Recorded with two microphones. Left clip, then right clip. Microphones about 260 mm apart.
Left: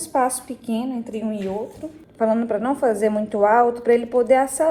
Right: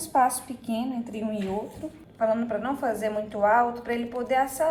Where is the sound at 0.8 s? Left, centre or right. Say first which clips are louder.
Left 4 dB; centre.